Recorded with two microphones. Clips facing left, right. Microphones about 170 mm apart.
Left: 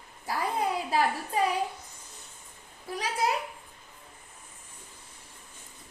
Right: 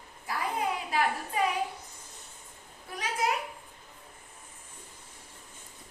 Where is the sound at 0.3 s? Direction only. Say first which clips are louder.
Left 2 dB; 35° left (ahead or behind).